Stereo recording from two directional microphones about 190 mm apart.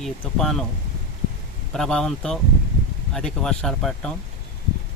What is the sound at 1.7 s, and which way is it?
Speech, 5° left (ahead or behind).